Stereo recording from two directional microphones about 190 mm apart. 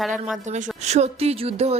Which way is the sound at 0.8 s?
35° right (ahead or behind).